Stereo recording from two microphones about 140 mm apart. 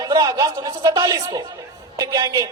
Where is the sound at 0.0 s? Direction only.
30° right (ahead or behind).